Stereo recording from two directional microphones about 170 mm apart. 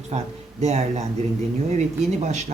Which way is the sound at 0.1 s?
40° right (ahead or behind).